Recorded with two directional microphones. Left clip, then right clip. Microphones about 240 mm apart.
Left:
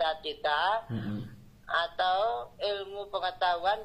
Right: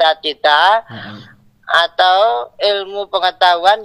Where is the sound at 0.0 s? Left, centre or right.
Right.